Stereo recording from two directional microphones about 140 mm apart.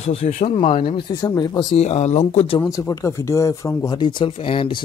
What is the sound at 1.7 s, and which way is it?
Speech, 50° left (ahead or behind).